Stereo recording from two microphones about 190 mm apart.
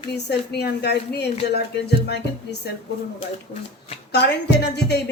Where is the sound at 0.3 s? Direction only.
60° left (ahead or behind).